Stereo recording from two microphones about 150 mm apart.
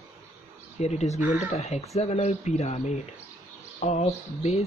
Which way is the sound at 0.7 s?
45° left (ahead or behind).